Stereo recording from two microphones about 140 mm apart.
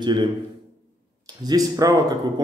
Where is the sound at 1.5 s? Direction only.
25° right (ahead or behind).